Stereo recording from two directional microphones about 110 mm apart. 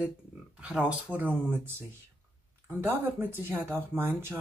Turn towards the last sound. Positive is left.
turn(degrees=-20)  # may be behind; listen again after turning